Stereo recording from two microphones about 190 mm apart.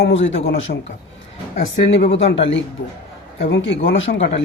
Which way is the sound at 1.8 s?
60° left (ahead or behind).